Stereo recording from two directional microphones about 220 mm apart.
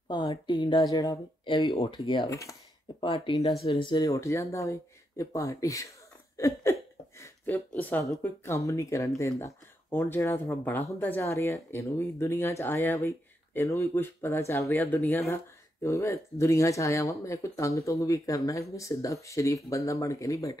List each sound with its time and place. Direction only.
0.1 s speech: 20° left (ahead or behind)